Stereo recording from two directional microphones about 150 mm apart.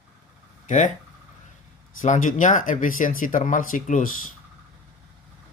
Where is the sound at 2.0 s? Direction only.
55° left (ahead or behind).